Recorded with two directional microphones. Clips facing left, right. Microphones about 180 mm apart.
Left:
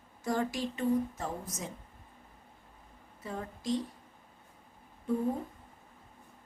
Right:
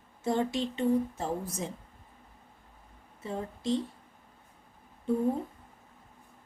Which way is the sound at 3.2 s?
25° right (ahead or behind).